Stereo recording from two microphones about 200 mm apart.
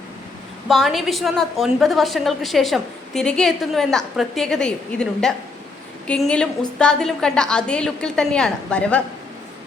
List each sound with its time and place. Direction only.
0.7 s a woman's voice: centre (ahead or behind)